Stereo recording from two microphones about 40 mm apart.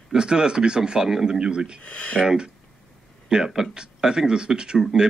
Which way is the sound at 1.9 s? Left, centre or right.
Left.